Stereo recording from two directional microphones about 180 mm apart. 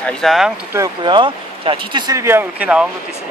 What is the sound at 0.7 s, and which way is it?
Speech, 25° right (ahead or behind).